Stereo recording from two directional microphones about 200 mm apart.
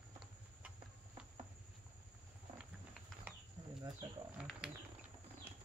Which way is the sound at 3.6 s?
20° right (ahead or behind).